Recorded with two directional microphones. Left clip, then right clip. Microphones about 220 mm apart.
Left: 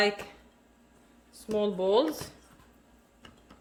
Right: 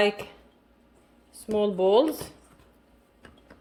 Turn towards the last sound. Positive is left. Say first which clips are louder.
# right 4 dB
turn(degrees=-15)  # may be behind; listen again after turning